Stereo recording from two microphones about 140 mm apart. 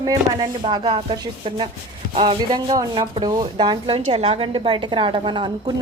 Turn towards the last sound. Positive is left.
turn(degrees=-35)  # may be behind; listen again after turning